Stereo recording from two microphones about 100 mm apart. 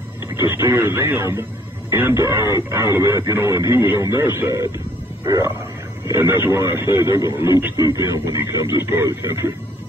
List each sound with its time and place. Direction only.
0.4 s speech: 25° right (ahead or behind)